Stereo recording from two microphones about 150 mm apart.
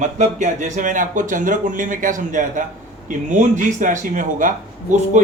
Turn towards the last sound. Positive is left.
turn(degrees=-55)  # may be behind; listen again after turning